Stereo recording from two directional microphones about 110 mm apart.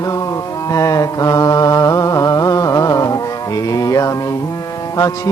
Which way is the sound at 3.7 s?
30° left (ahead or behind).